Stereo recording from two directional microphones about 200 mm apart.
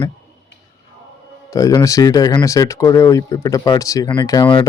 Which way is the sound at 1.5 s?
15° left (ahead or behind).